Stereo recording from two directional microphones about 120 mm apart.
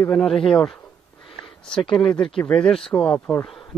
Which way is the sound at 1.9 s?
5° left (ahead or behind).